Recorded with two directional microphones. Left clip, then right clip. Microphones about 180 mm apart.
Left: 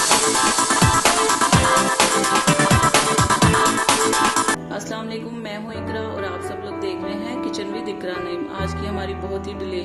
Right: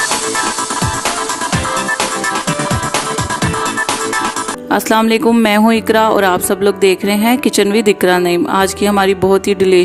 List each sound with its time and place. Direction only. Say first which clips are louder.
4.7 s speech: right 16 dB; 50° right (ahead or behind)